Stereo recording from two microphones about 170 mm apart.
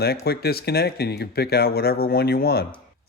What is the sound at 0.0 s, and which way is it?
A man's voice, 65° left (ahead or behind).